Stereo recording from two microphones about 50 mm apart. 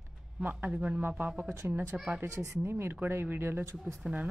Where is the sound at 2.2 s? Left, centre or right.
Right.